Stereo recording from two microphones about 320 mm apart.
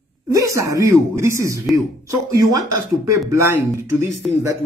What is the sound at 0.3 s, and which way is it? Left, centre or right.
Speech, centre.